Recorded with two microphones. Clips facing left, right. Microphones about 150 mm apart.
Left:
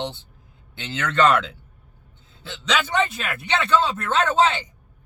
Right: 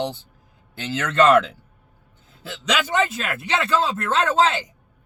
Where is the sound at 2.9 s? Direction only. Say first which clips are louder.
Right 1 dB; 5° right (ahead or behind).